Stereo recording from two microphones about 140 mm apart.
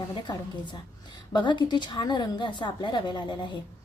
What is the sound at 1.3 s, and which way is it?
A woman's voice, 35° left (ahead or behind).